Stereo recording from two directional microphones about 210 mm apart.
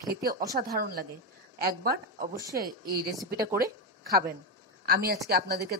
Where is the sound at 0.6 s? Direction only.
45° right (ahead or behind).